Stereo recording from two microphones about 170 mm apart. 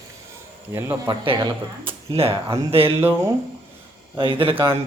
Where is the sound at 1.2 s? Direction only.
30° right (ahead or behind).